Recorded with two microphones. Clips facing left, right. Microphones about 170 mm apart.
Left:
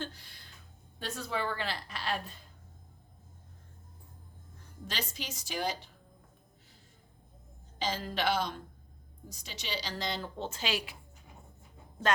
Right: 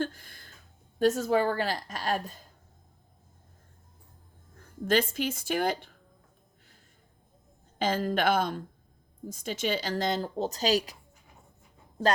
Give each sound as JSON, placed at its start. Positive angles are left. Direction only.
{"t": 0.0, "sound": "a sound", "side_deg": -50}
{"t": 0.9, "sound": "a woman's voice", "side_deg": -45}
{"t": 4.9, "sound": "a woman's voice", "side_deg": -55}
{"t": 7.8, "sound": "a woman's voice", "side_deg": -55}